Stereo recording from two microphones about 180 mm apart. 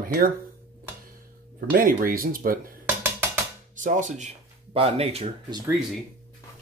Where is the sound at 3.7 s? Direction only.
45° right (ahead or behind).